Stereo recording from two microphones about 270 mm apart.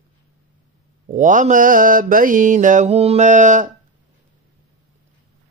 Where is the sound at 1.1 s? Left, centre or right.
Right.